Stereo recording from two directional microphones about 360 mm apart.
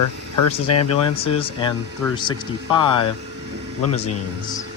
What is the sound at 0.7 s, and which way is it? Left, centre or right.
Speech, left.